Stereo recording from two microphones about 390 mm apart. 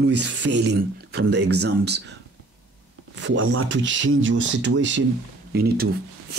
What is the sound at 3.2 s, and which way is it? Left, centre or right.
Speech, right.